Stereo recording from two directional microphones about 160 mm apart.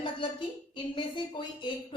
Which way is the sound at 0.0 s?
30° left (ahead or behind).